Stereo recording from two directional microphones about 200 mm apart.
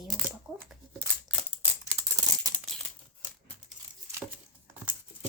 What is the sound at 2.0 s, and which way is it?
Scissors, 15° right (ahead or behind).